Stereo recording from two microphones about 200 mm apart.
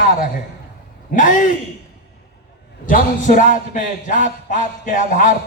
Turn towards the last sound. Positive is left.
turn(degrees=40)  # may be behind; listen again after turning